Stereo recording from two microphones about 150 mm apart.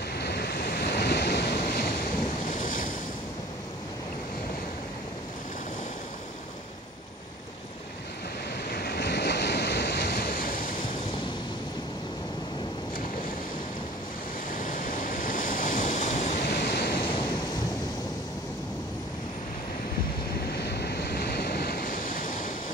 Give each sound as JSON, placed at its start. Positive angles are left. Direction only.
{"t": 0.1, "sound": "waves", "side_deg": 90}
{"t": 2.5, "sound": "waves", "side_deg": 60}
{"t": 8.6, "sound": "waves", "side_deg": 90}
{"t": 14.5, "sound": "waves", "side_deg": 65}
{"t": 16.6, "sound": "waves", "side_deg": 90}
{"t": 20.5, "sound": "waves", "side_deg": 90}